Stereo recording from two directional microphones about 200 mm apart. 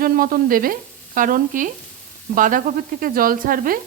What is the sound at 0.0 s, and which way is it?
Sizzle, 45° right (ahead or behind).